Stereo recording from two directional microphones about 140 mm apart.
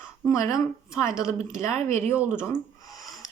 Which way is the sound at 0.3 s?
20° left (ahead or behind).